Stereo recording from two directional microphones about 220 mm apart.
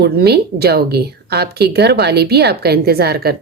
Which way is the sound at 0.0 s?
45° right (ahead or behind).